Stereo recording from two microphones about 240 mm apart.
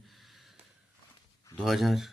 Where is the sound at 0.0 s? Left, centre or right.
Centre.